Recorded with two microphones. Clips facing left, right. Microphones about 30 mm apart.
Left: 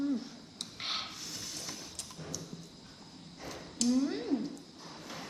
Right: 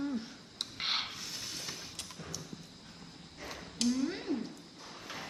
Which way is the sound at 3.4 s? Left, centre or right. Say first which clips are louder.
Left 1 dB; right.